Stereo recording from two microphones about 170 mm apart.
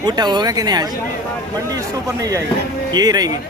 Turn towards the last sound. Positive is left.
turn(degrees=-20)  # may be behind; listen again after turning